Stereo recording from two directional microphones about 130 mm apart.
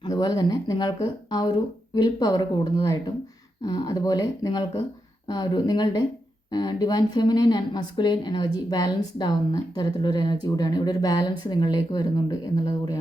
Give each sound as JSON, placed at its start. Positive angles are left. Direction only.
{"t": 0.0, "sound": "speech", "side_deg": 30}